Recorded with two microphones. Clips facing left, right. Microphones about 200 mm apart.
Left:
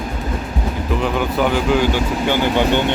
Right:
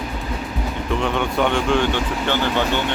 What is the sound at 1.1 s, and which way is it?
Speech, 5° left (ahead or behind).